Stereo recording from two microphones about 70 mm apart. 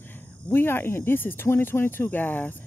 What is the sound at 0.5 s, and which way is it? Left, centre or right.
Speech, left.